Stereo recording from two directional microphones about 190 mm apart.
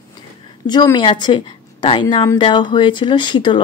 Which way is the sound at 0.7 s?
20° left (ahead or behind).